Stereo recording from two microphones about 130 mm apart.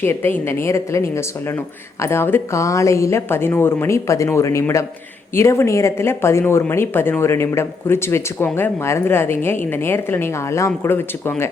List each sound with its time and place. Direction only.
0.0 s a woman's voice: 15° left (ahead or behind)